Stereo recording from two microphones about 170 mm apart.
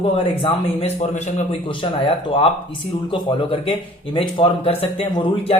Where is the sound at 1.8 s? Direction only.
30° left (ahead or behind).